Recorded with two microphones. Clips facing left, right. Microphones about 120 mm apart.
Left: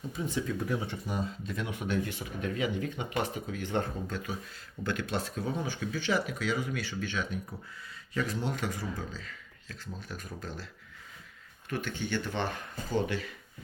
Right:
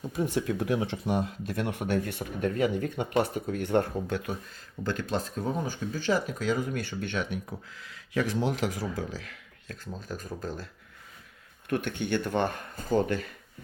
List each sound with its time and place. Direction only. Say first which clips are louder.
0.2 s speech: right 5 dB; 65° right (ahead or behind)
4.9 s speech: right 2 dB; 40° right (ahead or behind); by 7.3 s 60° right (ahead or behind)
7.8 s speech: right 4 dB; 90° right
9.6 s speech: right 4 dB; 40° right (ahead or behind)
11.7 s speech: right 5 dB; 55° right (ahead or behind)